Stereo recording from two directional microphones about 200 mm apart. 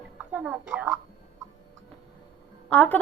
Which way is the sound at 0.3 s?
5° right (ahead or behind).